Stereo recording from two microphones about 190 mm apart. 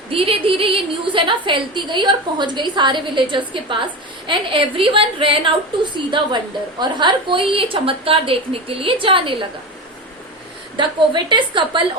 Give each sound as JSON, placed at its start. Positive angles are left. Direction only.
{"t": 0.1, "sound": "a woman's voice", "side_deg": -30}
{"t": 10.8, "sound": "a woman's voice", "side_deg": -25}